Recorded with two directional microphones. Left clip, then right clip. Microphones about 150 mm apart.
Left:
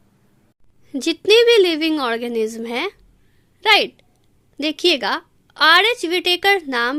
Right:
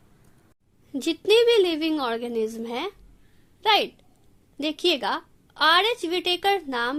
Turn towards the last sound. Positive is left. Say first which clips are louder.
# left 7 dB
turn(degrees=45)  # may be behind; listen again after turning